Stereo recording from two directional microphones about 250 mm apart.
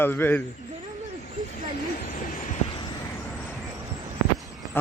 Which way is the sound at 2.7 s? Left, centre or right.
Centre.